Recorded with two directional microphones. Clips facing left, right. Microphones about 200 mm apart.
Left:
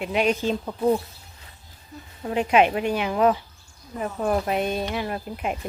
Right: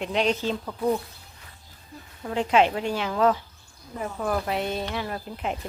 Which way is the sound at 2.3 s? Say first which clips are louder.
Left 2 dB; 15° left (ahead or behind).